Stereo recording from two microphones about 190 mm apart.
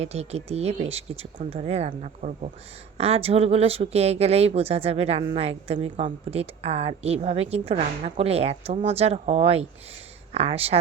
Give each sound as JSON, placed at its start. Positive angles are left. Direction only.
{"t": 0.0, "sound": "speech", "side_deg": -35}